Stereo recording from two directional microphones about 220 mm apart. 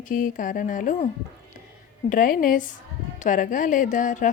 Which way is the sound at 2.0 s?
40° left (ahead or behind).